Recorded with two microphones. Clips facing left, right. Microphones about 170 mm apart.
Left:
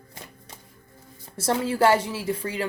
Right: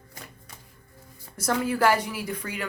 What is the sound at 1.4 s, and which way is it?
A woman's voice, 25° left (ahead or behind).